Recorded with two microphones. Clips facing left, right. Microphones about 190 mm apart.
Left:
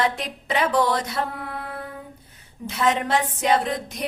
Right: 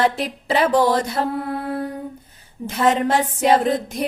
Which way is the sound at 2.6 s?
30° right (ahead or behind).